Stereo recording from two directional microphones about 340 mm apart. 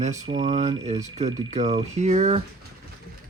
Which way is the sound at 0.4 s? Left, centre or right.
Centre.